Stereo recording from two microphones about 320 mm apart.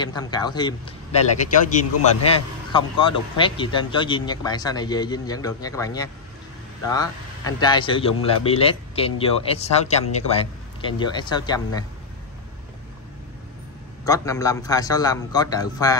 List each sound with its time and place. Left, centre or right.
0.0 s a man's voice: centre
14.0 s a man's voice: centre